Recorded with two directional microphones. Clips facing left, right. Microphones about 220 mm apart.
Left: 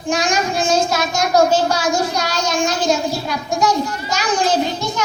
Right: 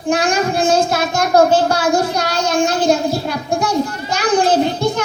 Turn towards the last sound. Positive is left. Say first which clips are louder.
# right 4 dB
turn(degrees=-55)  # may be behind; listen again after turning